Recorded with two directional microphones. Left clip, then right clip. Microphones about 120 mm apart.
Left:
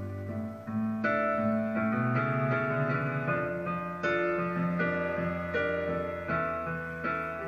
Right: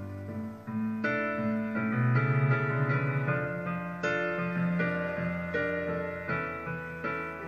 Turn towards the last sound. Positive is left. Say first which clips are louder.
# left 2 dB
turn(degrees=-30)  # may be behind; listen again after turning